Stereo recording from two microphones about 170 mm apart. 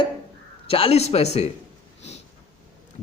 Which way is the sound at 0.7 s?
35° left (ahead or behind).